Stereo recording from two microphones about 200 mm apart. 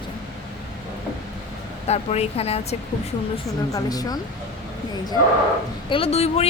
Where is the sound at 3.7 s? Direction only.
20° left (ahead or behind).